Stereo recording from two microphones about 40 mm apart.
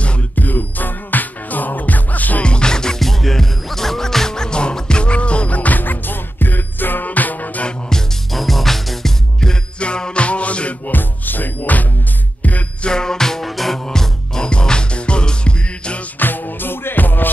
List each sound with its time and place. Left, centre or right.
0.4 s music: left
2.4 s music: left
3.0 s music: centre; by 7.6 s left
8.3 s music: centre
9.8 s music: left
10.9 s music: left
12.8 s music: centre
13.5 s music: centre
13.8 s music: centre
16.2 s music: left